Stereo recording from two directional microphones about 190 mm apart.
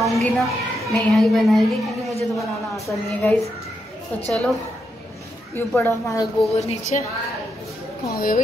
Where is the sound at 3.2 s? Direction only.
5° left (ahead or behind).